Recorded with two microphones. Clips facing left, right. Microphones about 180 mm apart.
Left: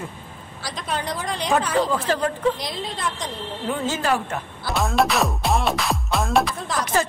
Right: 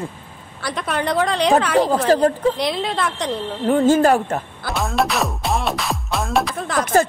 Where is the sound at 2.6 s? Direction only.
70° right (ahead or behind); by 4.7 s 45° right (ahead or behind).